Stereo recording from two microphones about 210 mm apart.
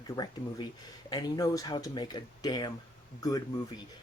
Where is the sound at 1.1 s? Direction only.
20° left (ahead or behind).